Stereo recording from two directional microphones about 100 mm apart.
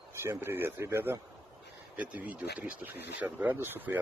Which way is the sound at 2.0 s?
15° right (ahead or behind).